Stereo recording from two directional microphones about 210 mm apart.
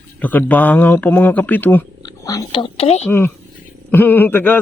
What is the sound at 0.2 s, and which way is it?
A man's voice, 10° left (ahead or behind).